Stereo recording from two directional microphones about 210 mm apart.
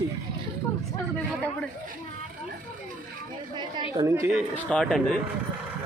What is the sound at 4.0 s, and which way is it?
Speech, 15° right (ahead or behind).